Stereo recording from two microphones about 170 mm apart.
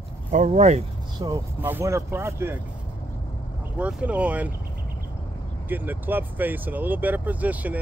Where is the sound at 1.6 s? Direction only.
10° right (ahead or behind).